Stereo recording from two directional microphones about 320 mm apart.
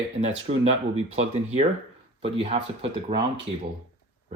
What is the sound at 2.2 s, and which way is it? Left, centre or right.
Speech, centre.